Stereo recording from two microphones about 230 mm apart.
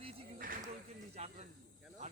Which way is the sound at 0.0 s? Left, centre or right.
Right.